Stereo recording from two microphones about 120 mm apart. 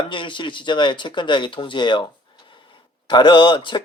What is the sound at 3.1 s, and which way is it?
Speech, 40° left (ahead or behind).